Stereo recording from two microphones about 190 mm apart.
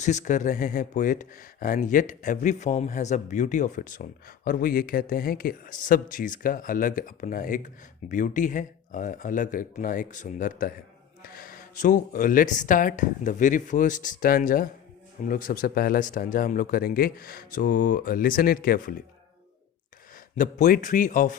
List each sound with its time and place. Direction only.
0.0 s speech: 40° left (ahead or behind)
20.3 s speech: 45° left (ahead or behind)